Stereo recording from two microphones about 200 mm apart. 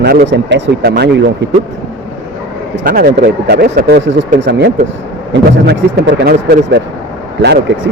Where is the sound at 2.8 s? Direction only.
45° right (ahead or behind); by 6.2 s 60° right (ahead or behind).